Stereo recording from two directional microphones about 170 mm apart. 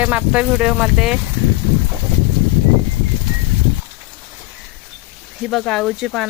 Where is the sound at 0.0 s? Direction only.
10° right (ahead or behind).